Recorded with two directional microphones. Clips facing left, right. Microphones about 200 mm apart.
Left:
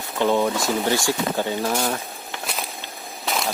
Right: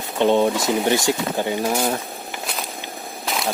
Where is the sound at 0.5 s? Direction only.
5° right (ahead or behind).